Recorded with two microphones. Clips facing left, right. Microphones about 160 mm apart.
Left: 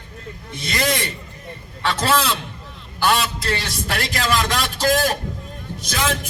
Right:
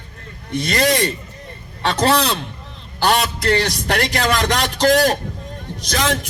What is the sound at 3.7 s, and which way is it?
A man's voice, 40° right (ahead or behind).